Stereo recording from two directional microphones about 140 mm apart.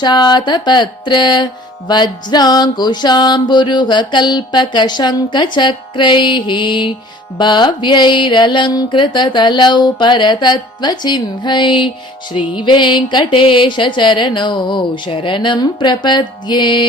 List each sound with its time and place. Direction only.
0.0 s music: 30° left (ahead or behind)